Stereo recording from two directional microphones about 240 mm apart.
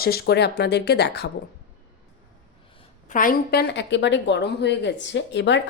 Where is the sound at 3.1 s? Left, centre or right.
Left.